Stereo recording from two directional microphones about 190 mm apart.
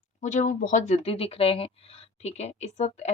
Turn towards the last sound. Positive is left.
turn(degrees=35)  # may be behind; listen again after turning